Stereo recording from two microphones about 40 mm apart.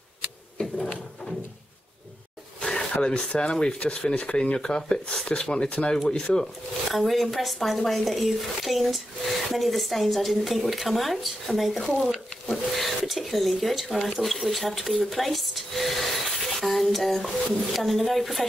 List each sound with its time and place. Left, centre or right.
0.6 s drawer open or close: left
2.9 s speech: left
5.7 s speech: left
6.0 s speech: centre
6.9 s speech: centre
12.1 s a sound: centre
13.6 s speech: centre